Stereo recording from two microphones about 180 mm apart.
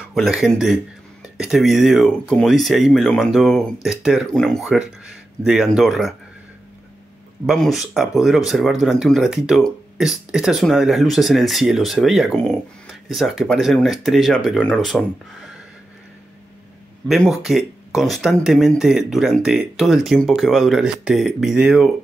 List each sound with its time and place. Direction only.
0.1 s speech: centre (ahead or behind)
7.4 s speech: centre (ahead or behind)
17.1 s speech: centre (ahead or behind)